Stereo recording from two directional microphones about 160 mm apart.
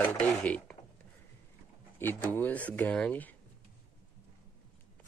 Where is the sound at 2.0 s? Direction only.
15° left (ahead or behind).